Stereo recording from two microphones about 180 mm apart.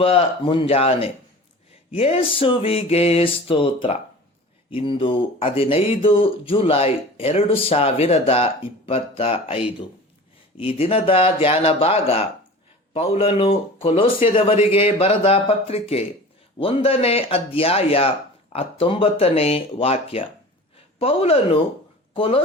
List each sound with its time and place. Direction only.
0.0 s speech: 30° left (ahead or behind)
10.6 s speech: 30° left (ahead or behind)